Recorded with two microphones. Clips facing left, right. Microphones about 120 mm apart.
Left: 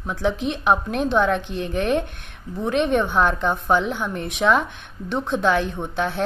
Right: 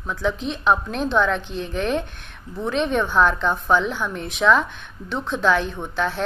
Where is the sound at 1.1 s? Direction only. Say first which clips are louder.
Even; 50° left (ahead or behind).